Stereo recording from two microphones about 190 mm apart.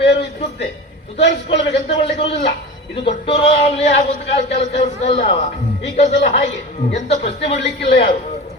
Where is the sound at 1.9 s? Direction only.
30° left (ahead or behind).